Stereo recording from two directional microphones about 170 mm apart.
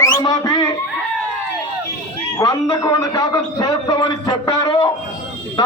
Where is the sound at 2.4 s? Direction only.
20° left (ahead or behind).